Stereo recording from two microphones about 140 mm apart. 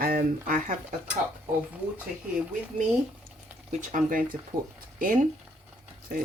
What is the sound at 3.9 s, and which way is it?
Speech, 75° right (ahead or behind).